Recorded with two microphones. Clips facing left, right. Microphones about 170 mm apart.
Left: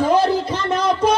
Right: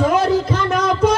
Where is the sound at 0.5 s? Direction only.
30° left (ahead or behind).